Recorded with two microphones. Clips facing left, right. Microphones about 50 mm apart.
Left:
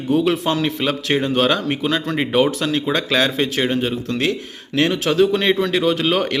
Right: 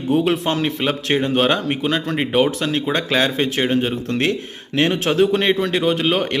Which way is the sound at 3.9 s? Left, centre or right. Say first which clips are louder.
Right 1 dB; right.